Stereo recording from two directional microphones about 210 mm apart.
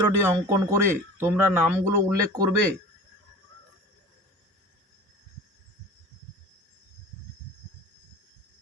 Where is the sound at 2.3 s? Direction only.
15° right (ahead or behind).